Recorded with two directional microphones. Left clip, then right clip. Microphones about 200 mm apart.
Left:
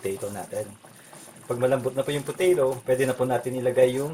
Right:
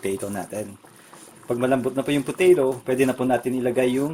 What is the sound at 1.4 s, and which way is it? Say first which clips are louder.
Speech: right 2 dB; 45° right (ahead or behind).